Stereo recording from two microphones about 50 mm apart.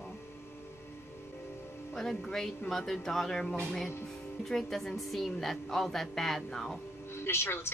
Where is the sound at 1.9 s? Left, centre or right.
Centre.